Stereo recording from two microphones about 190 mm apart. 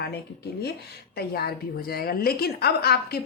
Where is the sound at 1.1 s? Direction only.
55° left (ahead or behind).